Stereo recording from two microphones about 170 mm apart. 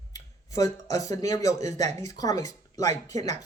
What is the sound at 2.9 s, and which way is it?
Speech, 45° right (ahead or behind).